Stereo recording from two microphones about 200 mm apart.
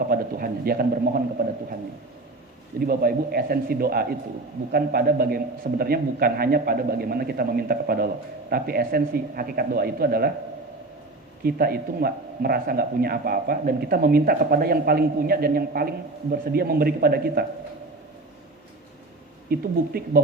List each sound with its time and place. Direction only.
0.1 s a man's voice: 50° right (ahead or behind)
2.8 s a man's voice: 50° right (ahead or behind)
11.4 s a man's voice: 50° right (ahead or behind)
19.5 s a man's voice: 50° right (ahead or behind)